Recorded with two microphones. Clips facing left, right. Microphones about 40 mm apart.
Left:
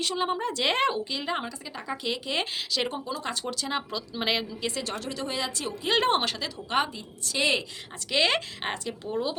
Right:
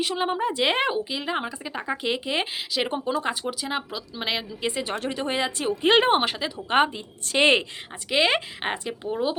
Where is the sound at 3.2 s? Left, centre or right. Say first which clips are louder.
Right 3 dB; centre.